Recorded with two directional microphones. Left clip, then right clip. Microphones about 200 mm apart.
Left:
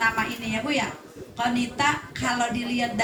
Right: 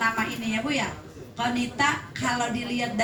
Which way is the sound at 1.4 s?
35° left (ahead or behind).